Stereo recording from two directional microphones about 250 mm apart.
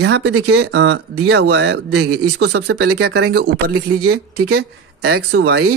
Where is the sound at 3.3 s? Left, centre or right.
Right.